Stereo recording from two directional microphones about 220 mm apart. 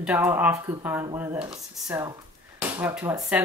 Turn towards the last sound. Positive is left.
turn(degrees=-10)  # may be behind; listen again after turning